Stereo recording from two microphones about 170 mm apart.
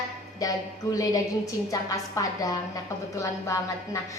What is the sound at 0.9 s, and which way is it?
A child's voice, 20° left (ahead or behind).